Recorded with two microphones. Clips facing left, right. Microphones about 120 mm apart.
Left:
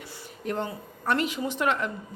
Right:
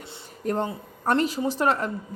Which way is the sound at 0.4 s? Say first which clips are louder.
Right 4 dB; 40° right (ahead or behind).